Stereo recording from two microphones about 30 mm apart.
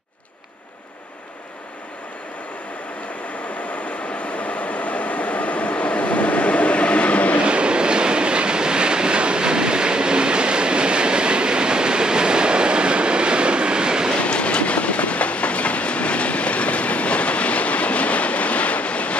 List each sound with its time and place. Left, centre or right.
4.1 s train: left
7.4 s train: right
14.2 s train: left